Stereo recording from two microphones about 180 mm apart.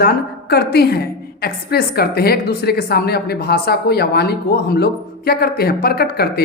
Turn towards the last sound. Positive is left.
turn(degrees=60)  # may be behind; listen again after turning